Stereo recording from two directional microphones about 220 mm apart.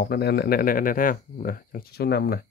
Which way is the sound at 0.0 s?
45° left (ahead or behind).